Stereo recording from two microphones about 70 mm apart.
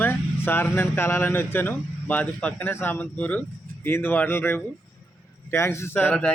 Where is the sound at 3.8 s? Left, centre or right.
Left.